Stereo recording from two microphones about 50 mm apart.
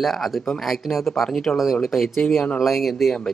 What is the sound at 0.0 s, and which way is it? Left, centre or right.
Speech, centre.